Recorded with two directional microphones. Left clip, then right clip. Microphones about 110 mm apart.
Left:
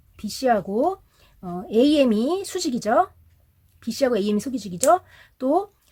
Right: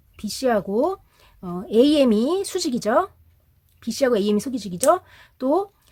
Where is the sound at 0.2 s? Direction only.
30° right (ahead or behind).